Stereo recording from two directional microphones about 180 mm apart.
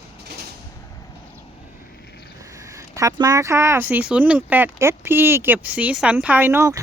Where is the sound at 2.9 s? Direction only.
20° right (ahead or behind).